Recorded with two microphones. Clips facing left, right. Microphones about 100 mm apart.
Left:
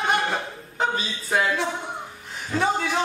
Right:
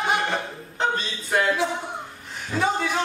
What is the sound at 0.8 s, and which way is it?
A man's voice, 5° left (ahead or behind).